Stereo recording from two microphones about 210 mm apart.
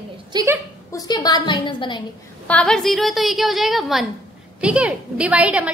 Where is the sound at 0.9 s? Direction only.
20° left (ahead or behind).